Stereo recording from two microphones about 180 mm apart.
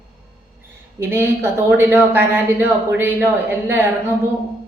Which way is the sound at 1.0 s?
15° right (ahead or behind).